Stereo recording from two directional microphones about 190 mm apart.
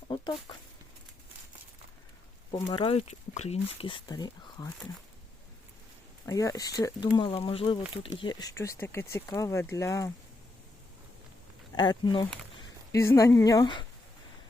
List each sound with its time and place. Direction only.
0.1 s a sound: 25° left (ahead or behind)
2.6 s speech: 30° left (ahead or behind)
6.2 s speech: 15° left (ahead or behind)
11.7 s speech: 20° left (ahead or behind)